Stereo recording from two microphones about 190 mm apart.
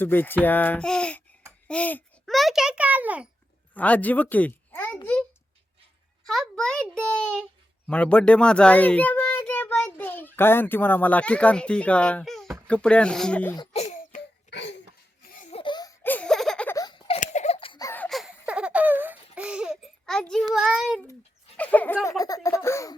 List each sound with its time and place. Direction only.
0.0 s a child's voice: 10° left (ahead or behind); by 3.2 s 10° right (ahead or behind)
3.8 s a child's voice: 10° left (ahead or behind)
6.2 s a child's voice: centre (ahead or behind)
14.1 s a sound: 40° left (ahead or behind)
14.5 s a sound: 65° left (ahead or behind)
15.3 s laughter: 45° left (ahead or behind)
15.5 s laughter: 25° left (ahead or behind)
16.0 s baby laughter: 5° left (ahead or behind)
16.7 s a sound: 20° left (ahead or behind)
17.1 s laughter: 35° left (ahead or behind)
17.8 s a sound: 10° left (ahead or behind)
20.5 s a child's voice: centre (ahead or behind); by 23.0 s 15° left (ahead or behind)